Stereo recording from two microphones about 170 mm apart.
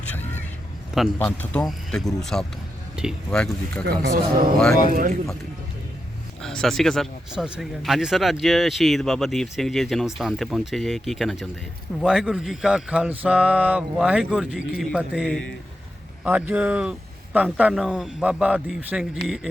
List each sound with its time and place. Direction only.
1.2 s speech: 10° left (ahead or behind)
2.9 s a sound: 5° right (ahead or behind)
3.2 s speech: 5° left (ahead or behind)
4.0 s a man's voice: 60° right (ahead or behind)
6.4 s speech: centre (ahead or behind)